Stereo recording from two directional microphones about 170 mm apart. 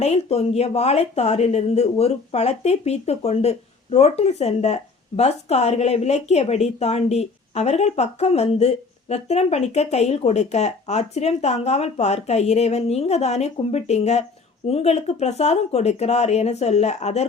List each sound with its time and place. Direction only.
0.0 s speech: 40° left (ahead or behind)